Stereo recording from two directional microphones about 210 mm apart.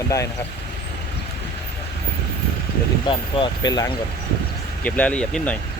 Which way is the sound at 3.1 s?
25° left (ahead or behind).